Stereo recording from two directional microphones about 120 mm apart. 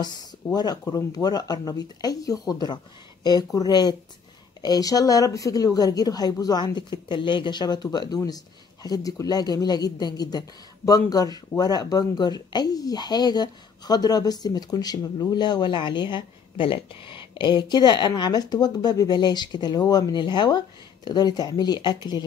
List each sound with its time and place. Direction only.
0.6 s speech: 35° left (ahead or behind)